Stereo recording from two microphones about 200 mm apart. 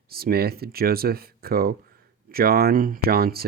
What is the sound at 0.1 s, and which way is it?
Speech, 50° right (ahead or behind).